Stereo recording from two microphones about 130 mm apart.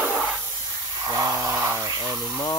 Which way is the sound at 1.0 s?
25° right (ahead or behind).